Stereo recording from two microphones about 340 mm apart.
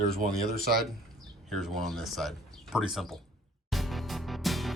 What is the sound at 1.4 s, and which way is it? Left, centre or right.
Speech, centre.